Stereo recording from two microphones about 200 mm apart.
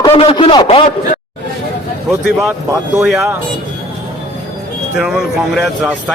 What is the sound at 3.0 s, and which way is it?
Speech, centre (ahead or behind).